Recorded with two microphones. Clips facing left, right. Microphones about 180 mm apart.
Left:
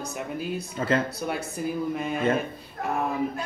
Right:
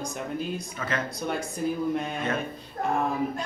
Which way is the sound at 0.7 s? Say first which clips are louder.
Left 8 dB; 30° left (ahead or behind).